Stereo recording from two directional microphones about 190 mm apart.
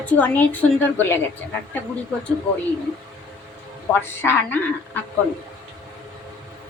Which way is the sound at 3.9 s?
10° left (ahead or behind).